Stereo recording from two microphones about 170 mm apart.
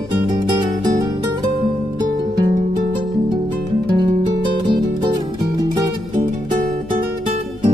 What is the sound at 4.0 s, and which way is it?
Music, 25° right (ahead or behind).